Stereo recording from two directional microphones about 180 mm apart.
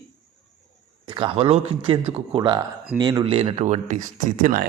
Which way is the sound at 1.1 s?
30° right (ahead or behind).